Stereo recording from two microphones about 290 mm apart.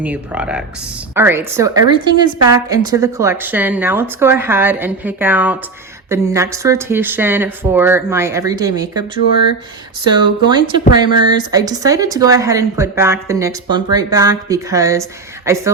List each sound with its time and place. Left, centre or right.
0.0 s a woman's voice: centre
10.1 s a woman's voice: centre